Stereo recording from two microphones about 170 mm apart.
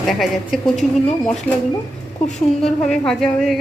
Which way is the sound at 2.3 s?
5° left (ahead or behind).